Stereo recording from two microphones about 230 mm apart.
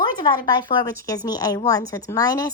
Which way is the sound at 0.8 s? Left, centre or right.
Centre.